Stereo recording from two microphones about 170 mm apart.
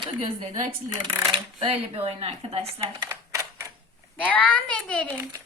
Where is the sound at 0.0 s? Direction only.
30° right (ahead or behind).